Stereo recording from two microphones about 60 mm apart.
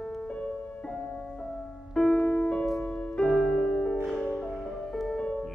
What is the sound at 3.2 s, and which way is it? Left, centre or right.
Music, centre.